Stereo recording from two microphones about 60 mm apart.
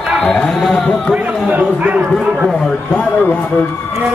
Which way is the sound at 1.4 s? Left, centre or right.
Right.